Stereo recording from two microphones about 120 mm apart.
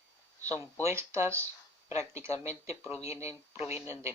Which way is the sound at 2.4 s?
25° right (ahead or behind).